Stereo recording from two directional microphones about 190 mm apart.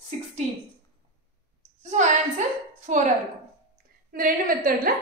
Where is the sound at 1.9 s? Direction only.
40° right (ahead or behind).